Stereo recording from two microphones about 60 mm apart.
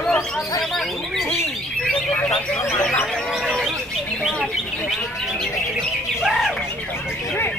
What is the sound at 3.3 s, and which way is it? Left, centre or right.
Speech, centre.